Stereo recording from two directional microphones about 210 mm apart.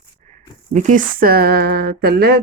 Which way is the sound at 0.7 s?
35° right (ahead or behind).